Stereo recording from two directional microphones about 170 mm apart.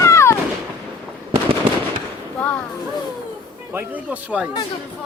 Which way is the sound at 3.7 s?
10° right (ahead or behind).